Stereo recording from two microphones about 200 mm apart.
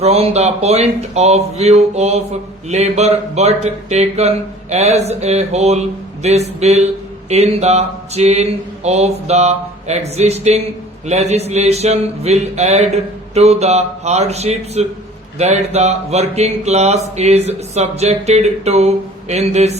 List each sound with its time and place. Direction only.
0.0 s speech: 30° right (ahead or behind)